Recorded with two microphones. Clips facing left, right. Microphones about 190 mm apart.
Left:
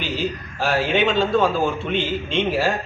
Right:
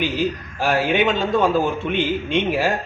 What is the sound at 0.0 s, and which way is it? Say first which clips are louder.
A man's voice: right 3 dB; 15° right (ahead or behind).